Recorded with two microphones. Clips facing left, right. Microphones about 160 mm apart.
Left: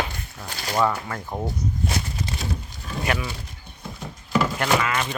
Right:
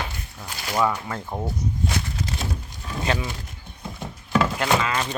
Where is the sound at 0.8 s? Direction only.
10° right (ahead or behind).